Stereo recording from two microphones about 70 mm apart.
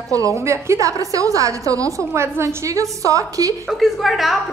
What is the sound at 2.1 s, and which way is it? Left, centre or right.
A woman's voice, right.